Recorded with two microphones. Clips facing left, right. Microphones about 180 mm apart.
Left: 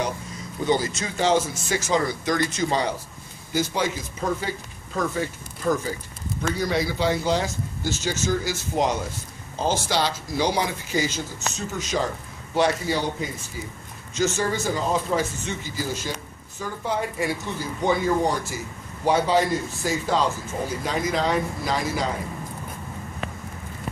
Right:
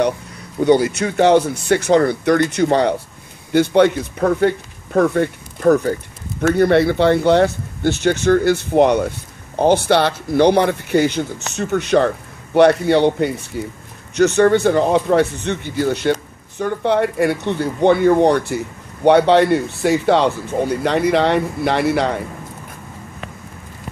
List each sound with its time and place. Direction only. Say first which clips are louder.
0.6 s speech: right 10 dB; 65° right (ahead or behind)